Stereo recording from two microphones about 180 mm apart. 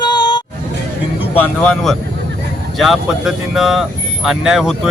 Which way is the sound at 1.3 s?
5° left (ahead or behind).